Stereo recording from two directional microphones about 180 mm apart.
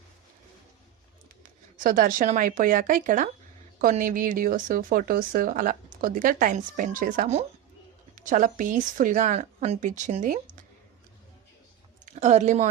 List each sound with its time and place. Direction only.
1.7 s speech: 50° right (ahead or behind)
12.0 s a woman's voice: 40° right (ahead or behind)